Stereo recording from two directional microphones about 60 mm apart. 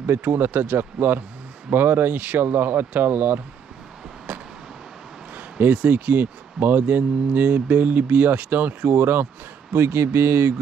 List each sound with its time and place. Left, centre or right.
0.0 s speech: right
4.3 s vehicle: right
5.6 s speech: right